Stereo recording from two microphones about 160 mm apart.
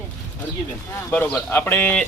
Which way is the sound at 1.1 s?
10° left (ahead or behind).